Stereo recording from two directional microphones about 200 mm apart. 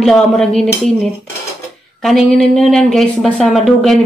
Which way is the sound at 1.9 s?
Centre (ahead or behind).